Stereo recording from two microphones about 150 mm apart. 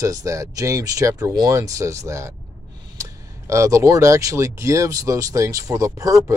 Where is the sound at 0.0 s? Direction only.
20° right (ahead or behind).